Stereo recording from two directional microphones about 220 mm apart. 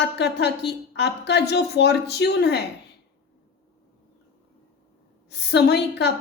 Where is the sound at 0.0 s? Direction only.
50° left (ahead or behind).